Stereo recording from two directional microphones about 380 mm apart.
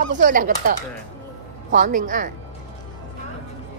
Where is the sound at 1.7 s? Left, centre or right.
Right.